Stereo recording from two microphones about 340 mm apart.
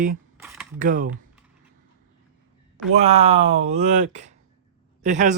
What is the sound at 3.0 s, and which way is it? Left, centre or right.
Speech, centre.